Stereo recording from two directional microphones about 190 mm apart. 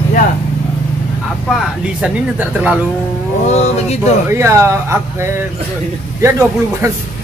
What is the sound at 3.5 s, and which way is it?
Speech, 35° left (ahead or behind).